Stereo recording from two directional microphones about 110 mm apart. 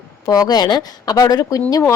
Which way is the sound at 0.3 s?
35° left (ahead or behind).